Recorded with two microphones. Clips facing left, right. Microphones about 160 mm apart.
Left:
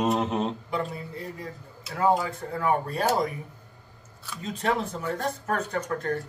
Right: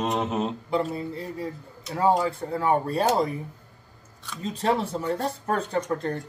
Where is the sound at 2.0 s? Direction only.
30° right (ahead or behind).